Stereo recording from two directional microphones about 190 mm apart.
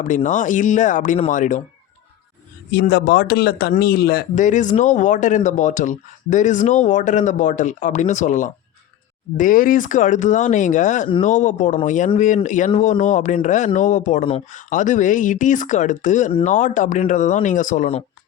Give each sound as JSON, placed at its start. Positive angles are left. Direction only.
{"t": 0.0, "sound": "speech", "side_deg": 40}
{"t": 2.7, "sound": "speech", "side_deg": 55}